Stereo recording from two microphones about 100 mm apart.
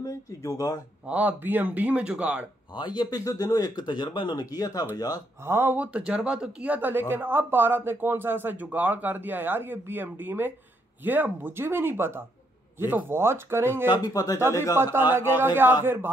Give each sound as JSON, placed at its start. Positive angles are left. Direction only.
{"t": 0.0, "sound": "a sound", "side_deg": 35}
{"t": 1.0, "sound": "speech", "side_deg": -15}
{"t": 2.7, "sound": "speech", "side_deg": 50}
{"t": 3.2, "sound": "speech", "side_deg": 35}
{"t": 5.4, "sound": "speech", "side_deg": -25}
{"t": 5.9, "sound": "speech", "side_deg": -10}
{"t": 13.8, "sound": "a man's voice", "side_deg": 40}
{"t": 14.8, "sound": "speech", "side_deg": -25}